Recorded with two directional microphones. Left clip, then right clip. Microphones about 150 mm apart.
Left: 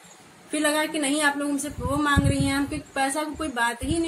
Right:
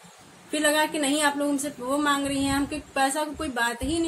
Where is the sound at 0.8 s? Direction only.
5° right (ahead or behind).